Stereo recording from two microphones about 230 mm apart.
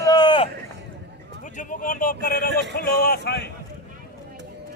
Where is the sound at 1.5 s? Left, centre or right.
Left.